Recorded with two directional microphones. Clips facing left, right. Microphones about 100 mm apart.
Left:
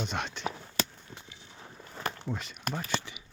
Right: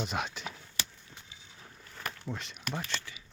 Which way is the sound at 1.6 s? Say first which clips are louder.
Left 5 dB; 25° left (ahead or behind).